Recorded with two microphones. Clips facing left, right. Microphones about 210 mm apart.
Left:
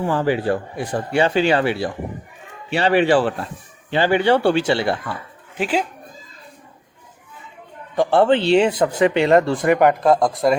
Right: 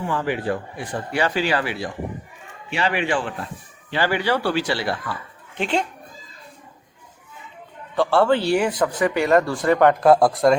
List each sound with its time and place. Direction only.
0.1 s speech: 35° left (ahead or behind)
5.5 s speech: 5° left (ahead or behind)
7.9 s speech: 20° left (ahead or behind)
10.0 s speech: 5° right (ahead or behind)